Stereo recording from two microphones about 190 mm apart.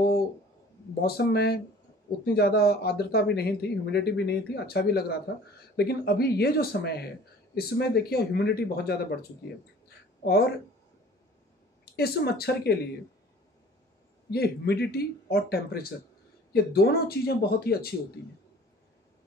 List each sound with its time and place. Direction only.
1.0 s speech: 55° left (ahead or behind)
10.2 s speech: 60° left (ahead or behind)
11.8 s speech: 55° left (ahead or behind)
14.3 s speech: 55° left (ahead or behind)